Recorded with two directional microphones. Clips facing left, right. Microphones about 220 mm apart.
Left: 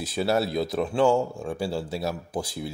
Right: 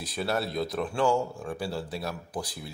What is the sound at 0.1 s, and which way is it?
Speech, 5° left (ahead or behind).